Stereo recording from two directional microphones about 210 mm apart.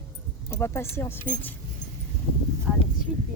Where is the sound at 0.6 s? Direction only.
10° left (ahead or behind).